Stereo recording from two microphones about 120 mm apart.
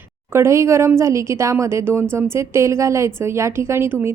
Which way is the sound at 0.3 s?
25° right (ahead or behind).